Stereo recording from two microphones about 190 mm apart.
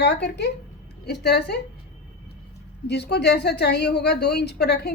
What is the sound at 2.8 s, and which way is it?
A woman's voice, 60° left (ahead or behind).